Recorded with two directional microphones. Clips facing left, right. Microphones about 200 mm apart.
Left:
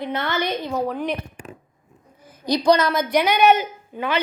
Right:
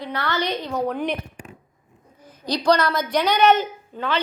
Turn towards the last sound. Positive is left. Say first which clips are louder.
# left 1 dB
turn(degrees=10)  # may be behind; listen again after turning